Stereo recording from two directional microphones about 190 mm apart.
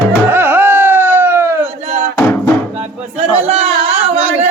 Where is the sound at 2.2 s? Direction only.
10° left (ahead or behind).